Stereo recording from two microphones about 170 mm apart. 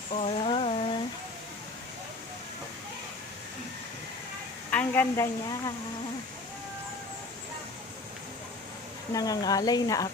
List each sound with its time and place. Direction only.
0.1 s a sound: 35° left (ahead or behind)
4.7 s a woman's voice: 10° left (ahead or behind)
9.1 s speech: 20° left (ahead or behind)